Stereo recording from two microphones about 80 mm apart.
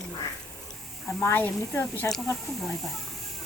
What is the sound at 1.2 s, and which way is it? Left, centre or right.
Duck, left.